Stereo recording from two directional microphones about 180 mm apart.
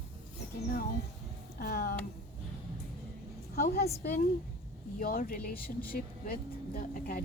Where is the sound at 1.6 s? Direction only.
55° left (ahead or behind).